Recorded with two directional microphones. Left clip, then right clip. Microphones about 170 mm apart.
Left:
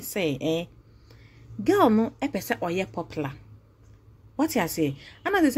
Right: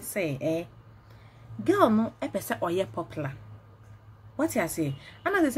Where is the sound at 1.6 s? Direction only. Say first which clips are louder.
Left 2 dB; 20° left (ahead or behind).